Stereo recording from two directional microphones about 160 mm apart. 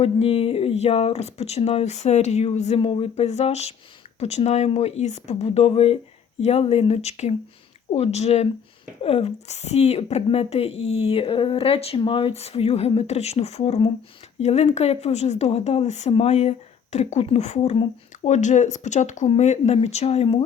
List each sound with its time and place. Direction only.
0.0 s a woman's voice: 35° left (ahead or behind)